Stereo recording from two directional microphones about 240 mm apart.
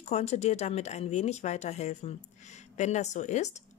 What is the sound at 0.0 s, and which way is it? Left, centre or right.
Speech, left.